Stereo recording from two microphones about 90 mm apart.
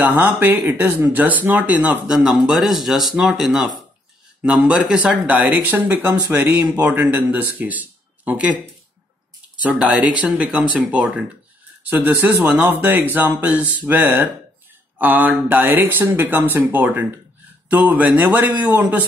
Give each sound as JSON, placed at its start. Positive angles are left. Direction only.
{"t": 0.0, "sound": "speech", "side_deg": -20}
{"t": 2.1, "sound": "speech", "side_deg": -5}
{"t": 9.6, "sound": "speech", "side_deg": -15}